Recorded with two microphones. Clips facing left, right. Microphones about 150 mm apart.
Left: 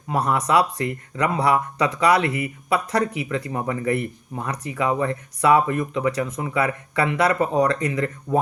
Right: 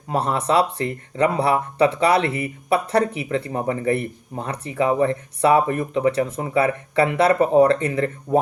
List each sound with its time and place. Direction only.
0.1 s speech: 30° right (ahead or behind)